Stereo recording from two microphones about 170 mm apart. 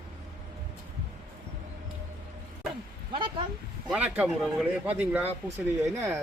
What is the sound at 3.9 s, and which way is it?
Speech, 5° right (ahead or behind).